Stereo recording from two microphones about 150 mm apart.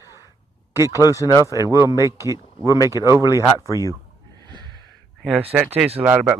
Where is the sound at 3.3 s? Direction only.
20° left (ahead or behind).